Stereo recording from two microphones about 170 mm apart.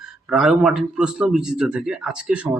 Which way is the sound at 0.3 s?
5° right (ahead or behind).